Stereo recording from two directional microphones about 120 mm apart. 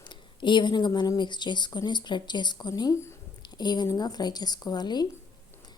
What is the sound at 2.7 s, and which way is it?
Speech, 25° left (ahead or behind).